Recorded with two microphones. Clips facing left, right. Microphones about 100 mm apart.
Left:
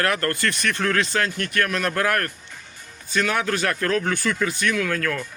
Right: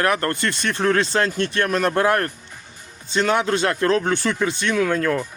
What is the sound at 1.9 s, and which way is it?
Speech, 25° right (ahead or behind).